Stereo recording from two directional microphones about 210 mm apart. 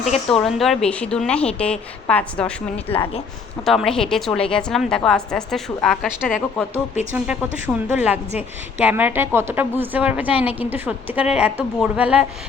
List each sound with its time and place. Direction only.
0.4 s a woman's voice: centre (ahead or behind)
2.9 s speech: 25° left (ahead or behind)
3.7 s a woman's voice: centre (ahead or behind)